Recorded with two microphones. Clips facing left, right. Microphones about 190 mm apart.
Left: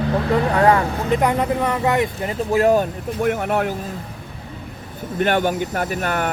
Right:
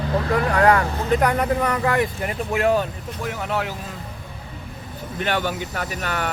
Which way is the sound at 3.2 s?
55° left (ahead or behind).